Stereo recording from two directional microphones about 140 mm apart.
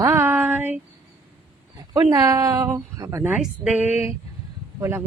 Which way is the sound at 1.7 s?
30° right (ahead or behind).